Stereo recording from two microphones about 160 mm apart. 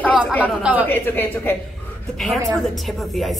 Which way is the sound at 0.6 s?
10° right (ahead or behind).